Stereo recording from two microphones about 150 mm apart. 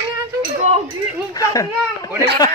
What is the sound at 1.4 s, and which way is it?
Speech, 25° left (ahead or behind).